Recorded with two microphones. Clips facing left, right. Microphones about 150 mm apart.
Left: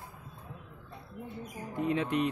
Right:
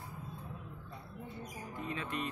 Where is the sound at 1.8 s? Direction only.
70° left (ahead or behind).